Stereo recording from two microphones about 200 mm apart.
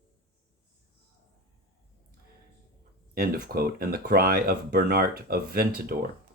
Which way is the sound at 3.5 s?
50° right (ahead or behind).